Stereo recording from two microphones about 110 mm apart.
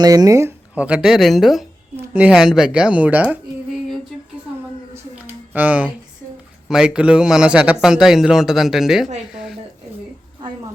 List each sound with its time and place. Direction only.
0.0 s speech: 35° right (ahead or behind)
0.8 s a man's voice: 10° right (ahead or behind)
2.0 s speech: 10° right (ahead or behind)
5.2 s a sound: 15° right (ahead or behind)
6.7 s a man's voice: 5° right (ahead or behind)
9.3 s a sound: 5° right (ahead or behind)